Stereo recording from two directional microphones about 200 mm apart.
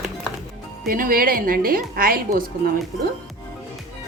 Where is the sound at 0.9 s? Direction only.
45° right (ahead or behind).